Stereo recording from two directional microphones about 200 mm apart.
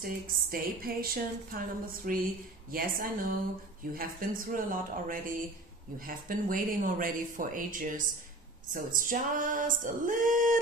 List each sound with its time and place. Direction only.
0.0 s a woman's voice: 45° right (ahead or behind)
8.7 s music: 45° right (ahead or behind)